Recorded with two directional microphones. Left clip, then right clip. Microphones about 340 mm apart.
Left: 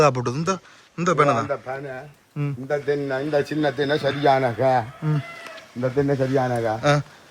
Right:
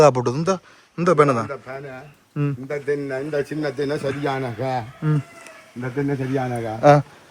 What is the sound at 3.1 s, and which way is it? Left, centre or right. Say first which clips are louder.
Speech: left 2 dB; left.